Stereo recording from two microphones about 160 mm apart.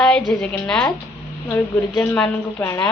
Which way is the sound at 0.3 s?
5° left (ahead or behind).